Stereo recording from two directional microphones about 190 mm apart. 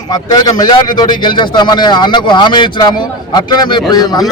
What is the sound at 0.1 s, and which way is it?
A man's voice, 20° left (ahead or behind).